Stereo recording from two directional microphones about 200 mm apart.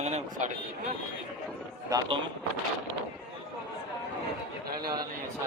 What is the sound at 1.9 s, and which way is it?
Speech, 20° right (ahead or behind).